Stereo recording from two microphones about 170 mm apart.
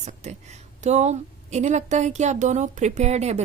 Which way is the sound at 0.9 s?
40° right (ahead or behind).